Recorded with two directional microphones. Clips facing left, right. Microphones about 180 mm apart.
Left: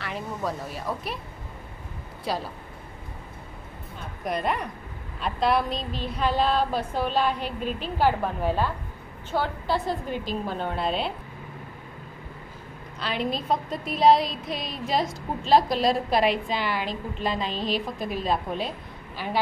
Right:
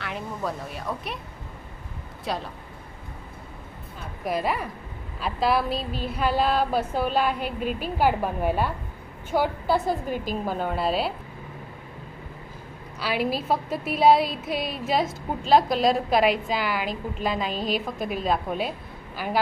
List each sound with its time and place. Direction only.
0.0 s a woman's voice: centre (ahead or behind)
2.2 s a woman's voice: centre (ahead or behind)
4.2 s a woman's voice: 5° right (ahead or behind)
5.2 s a sound: 5° right (ahead or behind)
10.5 s a woman's voice: 5° right (ahead or behind)
13.0 s a woman's voice: 5° right (ahead or behind)